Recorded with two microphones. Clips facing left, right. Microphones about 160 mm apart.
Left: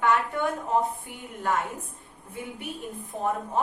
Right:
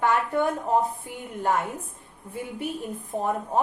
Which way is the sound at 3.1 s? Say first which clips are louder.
Right 2 dB; 40° right (ahead or behind).